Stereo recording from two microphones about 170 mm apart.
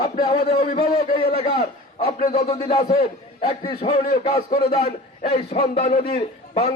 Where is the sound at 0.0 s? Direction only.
25° left (ahead or behind).